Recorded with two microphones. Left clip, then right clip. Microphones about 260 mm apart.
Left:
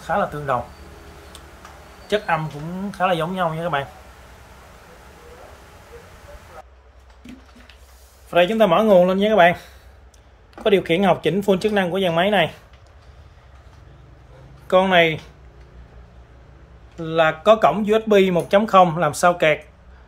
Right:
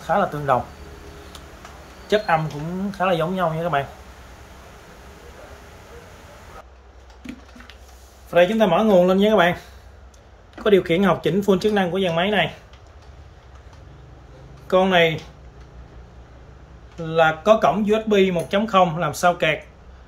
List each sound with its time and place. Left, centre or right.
0.0 s speech: centre
2.0 s a man's voice: centre
8.3 s speech: centre
14.7 s speech: centre
17.0 s speech: centre